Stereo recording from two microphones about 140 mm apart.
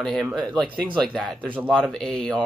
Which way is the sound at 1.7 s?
5° left (ahead or behind).